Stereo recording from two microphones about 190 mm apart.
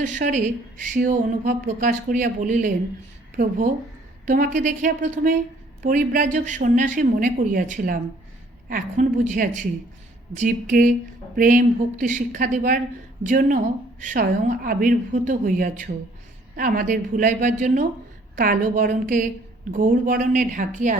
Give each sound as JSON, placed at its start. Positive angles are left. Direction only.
{"t": 0.0, "sound": "a woman's voice", "side_deg": -40}